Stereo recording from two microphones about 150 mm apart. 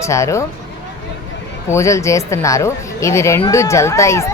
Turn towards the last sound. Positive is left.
turn(degrees=20)  # may be behind; listen again after turning